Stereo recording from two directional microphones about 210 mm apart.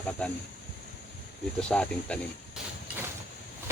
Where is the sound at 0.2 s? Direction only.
5° left (ahead or behind).